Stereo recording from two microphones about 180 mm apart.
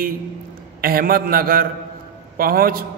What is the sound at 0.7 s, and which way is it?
A man's voice, 55° right (ahead or behind).